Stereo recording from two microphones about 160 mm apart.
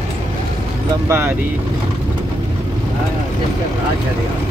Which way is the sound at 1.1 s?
15° right (ahead or behind).